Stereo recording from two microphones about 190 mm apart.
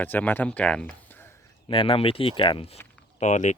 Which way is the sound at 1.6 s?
30° left (ahead or behind).